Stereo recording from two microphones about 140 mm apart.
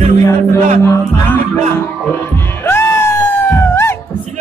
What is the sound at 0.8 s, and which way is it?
Music, 20° left (ahead or behind).